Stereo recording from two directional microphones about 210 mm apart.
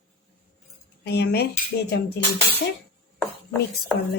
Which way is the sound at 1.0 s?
50° left (ahead or behind).